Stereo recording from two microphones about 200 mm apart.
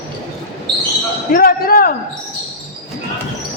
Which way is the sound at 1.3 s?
45° left (ahead or behind).